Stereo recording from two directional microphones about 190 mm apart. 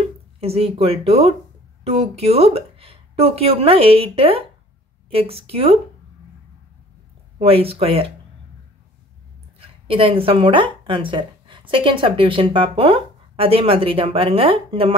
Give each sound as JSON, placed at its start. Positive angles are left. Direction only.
{"t": 0.4, "sound": "a woman's voice", "side_deg": -30}
{"t": 7.3, "sound": "a woman's voice", "side_deg": -30}
{"t": 9.6, "sound": "speech", "side_deg": -30}